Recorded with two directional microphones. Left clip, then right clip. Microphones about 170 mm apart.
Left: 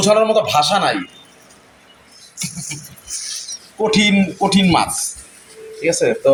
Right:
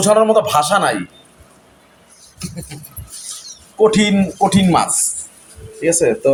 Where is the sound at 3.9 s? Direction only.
10° right (ahead or behind).